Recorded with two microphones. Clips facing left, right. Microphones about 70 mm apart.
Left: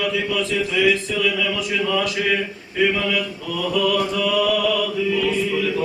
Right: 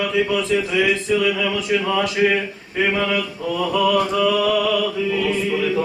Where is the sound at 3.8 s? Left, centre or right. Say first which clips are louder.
Right 3 dB; right.